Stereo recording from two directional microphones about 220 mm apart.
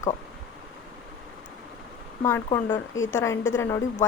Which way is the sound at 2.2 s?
10° left (ahead or behind).